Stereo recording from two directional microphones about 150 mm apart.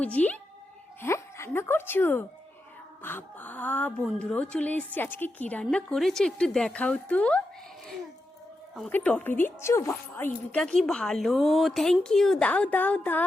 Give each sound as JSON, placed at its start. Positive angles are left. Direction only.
{"t": 0.0, "sound": "a woman's voice", "side_deg": 10}
{"t": 8.9, "sound": "a woman's voice", "side_deg": 10}
{"t": 10.6, "sound": "speech", "side_deg": 5}